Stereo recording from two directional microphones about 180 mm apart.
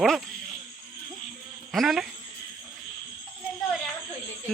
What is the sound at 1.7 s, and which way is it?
Speech, centre (ahead or behind).